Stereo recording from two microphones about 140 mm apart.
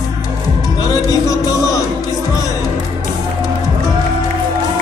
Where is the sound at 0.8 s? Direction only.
25° left (ahead or behind).